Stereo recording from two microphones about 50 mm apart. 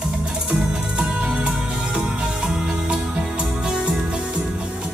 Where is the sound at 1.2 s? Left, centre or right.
Centre.